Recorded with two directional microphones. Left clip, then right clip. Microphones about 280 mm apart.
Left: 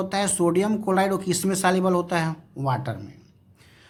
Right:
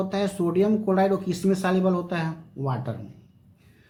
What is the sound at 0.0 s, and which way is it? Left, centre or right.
Speech, left.